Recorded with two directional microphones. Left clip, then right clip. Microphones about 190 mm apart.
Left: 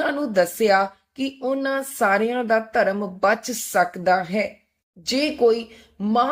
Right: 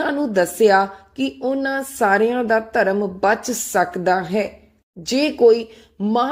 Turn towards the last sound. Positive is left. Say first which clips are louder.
# right 1 dB
turn(degrees=-15)  # may be behind; listen again after turning